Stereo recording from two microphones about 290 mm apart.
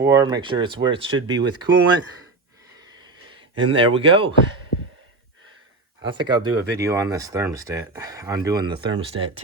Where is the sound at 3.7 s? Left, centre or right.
Centre.